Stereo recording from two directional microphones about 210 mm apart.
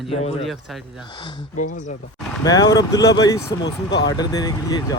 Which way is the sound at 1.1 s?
20° left (ahead or behind).